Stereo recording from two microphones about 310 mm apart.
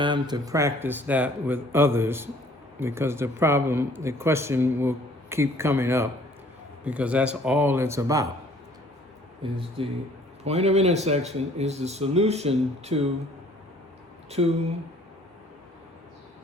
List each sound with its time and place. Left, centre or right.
0.0 s speech: centre
9.4 s speech: centre
14.3 s speech: centre